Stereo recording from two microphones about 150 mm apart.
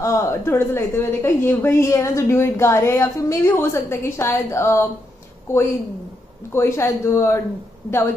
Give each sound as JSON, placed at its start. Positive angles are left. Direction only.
{"t": 0.0, "sound": "a woman's voice", "side_deg": 20}
{"t": 6.5, "sound": "a woman's voice", "side_deg": 15}